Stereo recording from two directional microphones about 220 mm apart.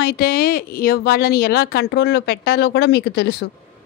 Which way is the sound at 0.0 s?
45° left (ahead or behind).